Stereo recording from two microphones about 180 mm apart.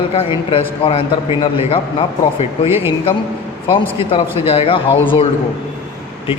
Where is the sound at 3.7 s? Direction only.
30° left (ahead or behind).